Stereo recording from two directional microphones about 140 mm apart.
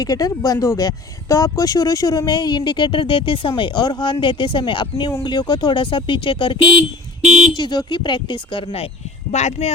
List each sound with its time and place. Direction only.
0.0 s speech: 25° left (ahead or behind)
9.3 s speech: 55° left (ahead or behind)